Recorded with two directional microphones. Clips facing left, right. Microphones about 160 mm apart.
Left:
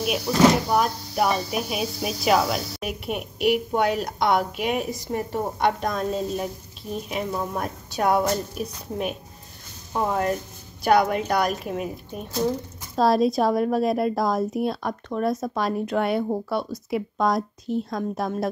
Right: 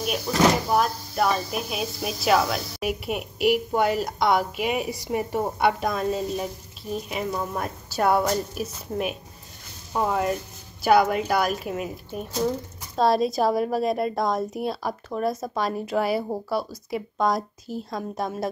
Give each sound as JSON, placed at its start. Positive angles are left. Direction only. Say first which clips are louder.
{"t": 0.3, "sound": "speech", "louder": "left 2 dB", "side_deg": 10}